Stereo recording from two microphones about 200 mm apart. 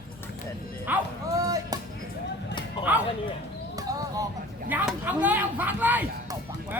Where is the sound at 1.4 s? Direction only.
15° right (ahead or behind).